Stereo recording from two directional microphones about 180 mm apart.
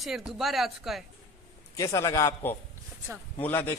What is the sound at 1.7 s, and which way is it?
A man's voice, 15° left (ahead or behind).